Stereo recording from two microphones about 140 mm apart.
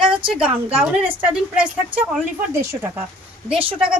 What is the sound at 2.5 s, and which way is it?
Speech, 20° right (ahead or behind).